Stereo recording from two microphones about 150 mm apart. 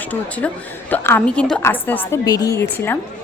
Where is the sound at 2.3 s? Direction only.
25° left (ahead or behind).